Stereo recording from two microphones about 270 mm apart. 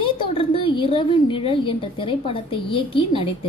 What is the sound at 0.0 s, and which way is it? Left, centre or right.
A woman's voice, centre.